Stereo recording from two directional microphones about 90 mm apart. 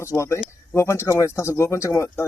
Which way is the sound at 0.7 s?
30° left (ahead or behind).